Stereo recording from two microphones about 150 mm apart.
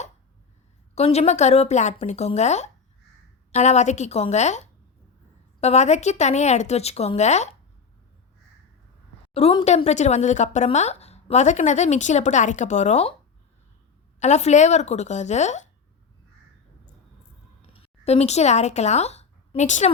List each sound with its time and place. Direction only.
0.9 s a woman's voice: 45° left (ahead or behind)
9.3 s a woman's voice: 40° left (ahead or behind)
14.2 s a woman's voice: 50° left (ahead or behind)
17.7 s speech: 45° left (ahead or behind)